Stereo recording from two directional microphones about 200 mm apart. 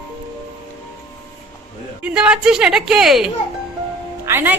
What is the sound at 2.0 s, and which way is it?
A woman's voice, 5° right (ahead or behind).